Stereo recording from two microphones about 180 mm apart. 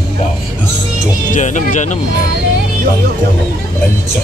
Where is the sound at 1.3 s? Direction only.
45° left (ahead or behind).